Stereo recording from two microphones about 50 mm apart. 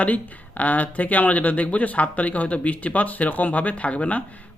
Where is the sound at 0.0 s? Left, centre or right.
Left.